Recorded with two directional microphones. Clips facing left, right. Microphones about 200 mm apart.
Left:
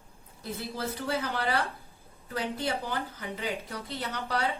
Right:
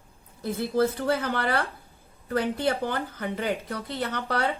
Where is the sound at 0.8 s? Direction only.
55° right (ahead or behind).